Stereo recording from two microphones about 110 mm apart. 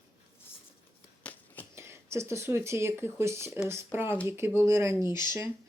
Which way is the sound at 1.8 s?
25° right (ahead or behind).